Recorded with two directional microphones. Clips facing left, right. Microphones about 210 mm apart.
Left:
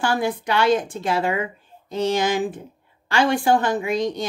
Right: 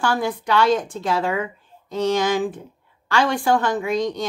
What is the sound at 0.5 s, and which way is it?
A woman's voice, 25° left (ahead or behind).